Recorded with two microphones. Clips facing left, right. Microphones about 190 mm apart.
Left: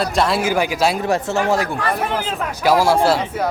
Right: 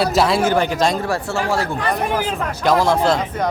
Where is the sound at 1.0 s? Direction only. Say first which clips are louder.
Left 3 dB; 20° left (ahead or behind).